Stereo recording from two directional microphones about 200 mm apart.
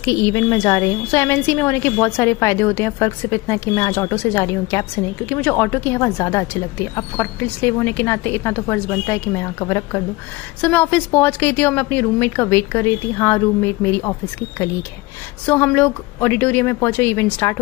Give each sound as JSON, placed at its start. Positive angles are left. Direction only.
{"t": 0.0, "sound": "a woman's voice", "side_deg": 15}
{"t": 15.4, "sound": "a woman's voice", "side_deg": 10}